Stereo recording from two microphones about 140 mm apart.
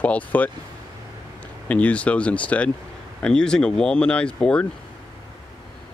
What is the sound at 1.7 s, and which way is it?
Speech, 10° left (ahead or behind).